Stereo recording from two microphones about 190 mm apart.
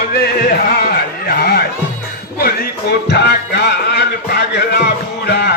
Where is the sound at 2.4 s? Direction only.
55° left (ahead or behind).